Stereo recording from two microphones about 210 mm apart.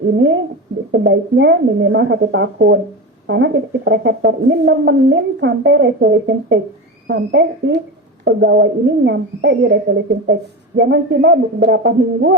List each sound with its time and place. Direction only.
0.9 s a woman's voice: 60° right (ahead or behind)